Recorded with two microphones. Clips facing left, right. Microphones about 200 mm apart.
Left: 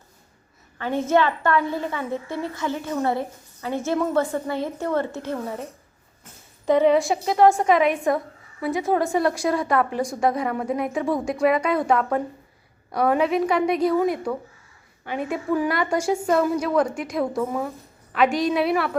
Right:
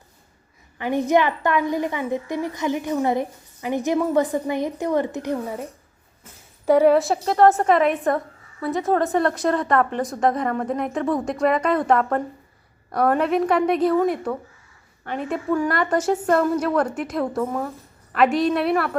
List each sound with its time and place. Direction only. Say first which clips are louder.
0.8 s a woman's voice: right 1 dB; 15° right (ahead or behind)
6.7 s a woman's voice: right 2 dB; 10° right (ahead or behind)
8.6 s a woman's voice: right 1 dB; 15° left (ahead or behind)